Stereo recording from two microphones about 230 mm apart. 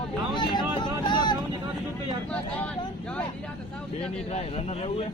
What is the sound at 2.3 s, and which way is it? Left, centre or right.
Speech, centre.